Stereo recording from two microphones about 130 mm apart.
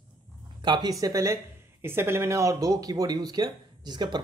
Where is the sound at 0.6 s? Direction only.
35° right (ahead or behind).